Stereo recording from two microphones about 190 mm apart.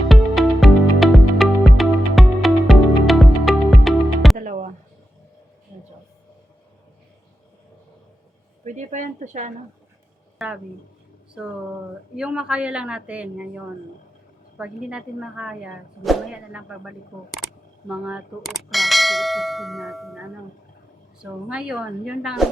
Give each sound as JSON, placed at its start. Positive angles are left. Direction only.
{"t": 0.1, "sound": "music", "side_deg": 0}
{"t": 4.4, "sound": "music", "side_deg": -45}
{"t": 8.6, "sound": "a sound", "side_deg": -40}
{"t": 10.3, "sound": "speech", "side_deg": -5}
{"t": 12.1, "sound": "bell", "side_deg": -5}
{"t": 14.6, "sound": "bell", "side_deg": -5}